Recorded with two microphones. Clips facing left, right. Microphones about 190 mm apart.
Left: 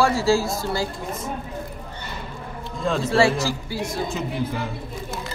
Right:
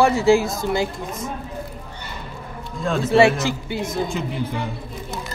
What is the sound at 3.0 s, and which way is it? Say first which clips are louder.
Speech: right 5 dB; 20° right (ahead or behind).